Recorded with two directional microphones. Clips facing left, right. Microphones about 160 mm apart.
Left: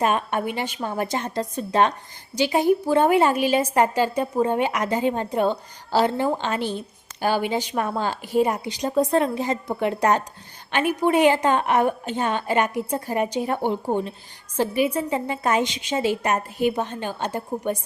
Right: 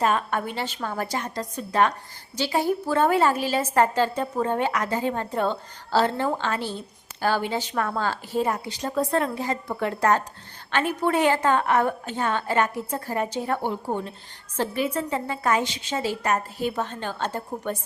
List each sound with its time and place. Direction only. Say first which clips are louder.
0.0 s a woman's voice: left 2 dB; 20° left (ahead or behind)